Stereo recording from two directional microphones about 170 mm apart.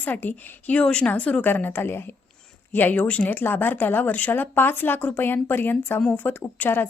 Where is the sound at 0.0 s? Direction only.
10° left (ahead or behind).